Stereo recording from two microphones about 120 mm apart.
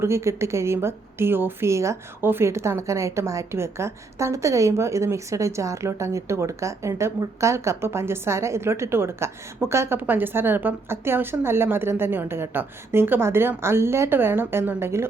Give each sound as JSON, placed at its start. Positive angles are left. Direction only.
{"t": 0.0, "sound": "a woman's voice", "side_deg": -25}